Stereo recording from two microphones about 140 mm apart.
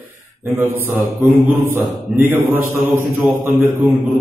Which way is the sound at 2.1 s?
5° right (ahead or behind).